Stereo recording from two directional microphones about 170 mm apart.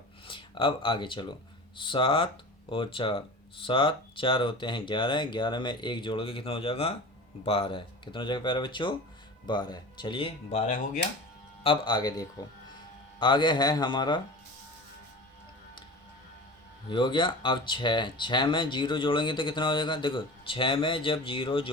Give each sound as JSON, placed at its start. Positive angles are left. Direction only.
{"t": 0.3, "sound": "speech", "side_deg": 30}
{"t": 11.6, "sound": "speech", "side_deg": 30}
{"t": 16.9, "sound": "speech", "side_deg": 30}